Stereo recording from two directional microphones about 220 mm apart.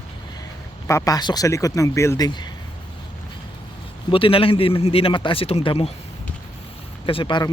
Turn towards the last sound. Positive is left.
turn(degrees=20)  # may be behind; listen again after turning